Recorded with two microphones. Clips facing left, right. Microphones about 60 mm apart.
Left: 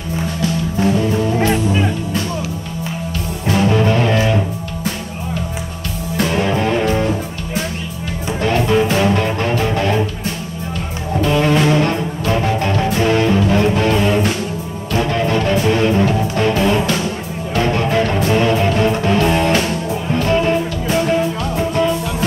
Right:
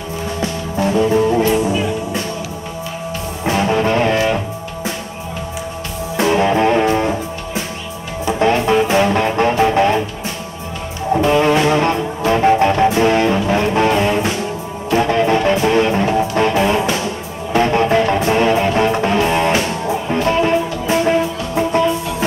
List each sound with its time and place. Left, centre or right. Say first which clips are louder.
0.4 s music: left 1 dB; right
3.4 s music: even; centre
6.1 s music: right 3 dB; centre
8.5 s music: even; centre
11.1 s music: right 1 dB; centre